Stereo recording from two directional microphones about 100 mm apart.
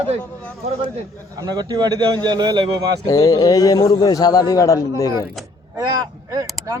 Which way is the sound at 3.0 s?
35° left (ahead or behind).